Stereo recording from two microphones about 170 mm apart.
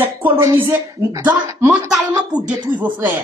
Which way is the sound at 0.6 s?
15° right (ahead or behind).